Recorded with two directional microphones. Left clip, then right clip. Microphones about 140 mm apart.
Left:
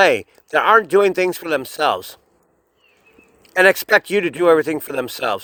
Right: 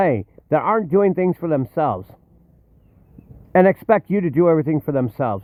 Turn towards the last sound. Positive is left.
turn(degrees=15)  # may be behind; listen again after turning